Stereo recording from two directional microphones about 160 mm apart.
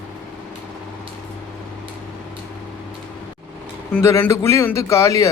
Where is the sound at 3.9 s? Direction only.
15° left (ahead or behind).